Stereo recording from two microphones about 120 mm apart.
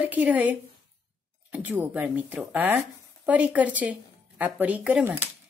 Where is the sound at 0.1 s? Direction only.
15° right (ahead or behind).